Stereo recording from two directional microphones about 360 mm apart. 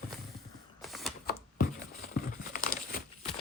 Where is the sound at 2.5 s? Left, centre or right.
Left.